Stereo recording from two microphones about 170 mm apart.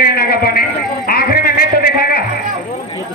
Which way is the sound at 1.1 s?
65° left (ahead or behind).